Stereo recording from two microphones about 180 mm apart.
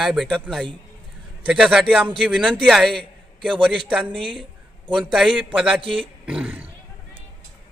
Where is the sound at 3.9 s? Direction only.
5° right (ahead or behind).